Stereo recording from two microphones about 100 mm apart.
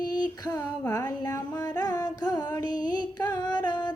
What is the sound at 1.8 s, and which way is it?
Carnatic music, 40° left (ahead or behind).